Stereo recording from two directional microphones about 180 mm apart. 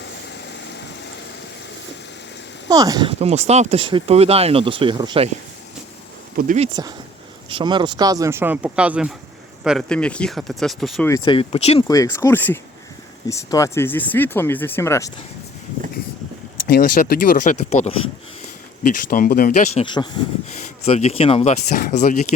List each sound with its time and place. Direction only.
2.6 s speech: 20° right (ahead or behind)
6.3 s speech: 45° right (ahead or behind)
7.5 s speech: 25° right (ahead or behind); by 11.0 s centre (ahead or behind)
11.3 s speech: 30° left (ahead or behind)
11.9 s speech: 20° left (ahead or behind)
16.6 s speech: 65° left (ahead or behind); by 17.9 s 40° left (ahead or behind)
18.8 s speech: 50° left (ahead or behind)
19.6 s speech: 30° left (ahead or behind)
20.5 s speech: 40° left (ahead or behind)
21.8 s speech: 55° left (ahead or behind)